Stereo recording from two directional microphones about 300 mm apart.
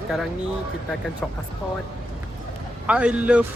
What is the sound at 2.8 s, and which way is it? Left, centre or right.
Speech, centre.